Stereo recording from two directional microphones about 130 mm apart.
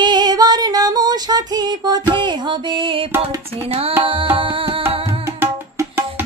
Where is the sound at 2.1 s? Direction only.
35° right (ahead or behind).